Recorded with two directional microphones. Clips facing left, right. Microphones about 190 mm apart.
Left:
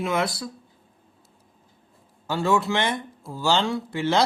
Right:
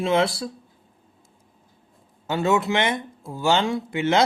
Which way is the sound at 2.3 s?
20° right (ahead or behind).